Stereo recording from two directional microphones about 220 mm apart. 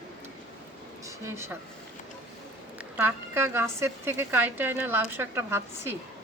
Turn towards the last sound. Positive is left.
turn(degrees=-10)  # may be behind; listen again after turning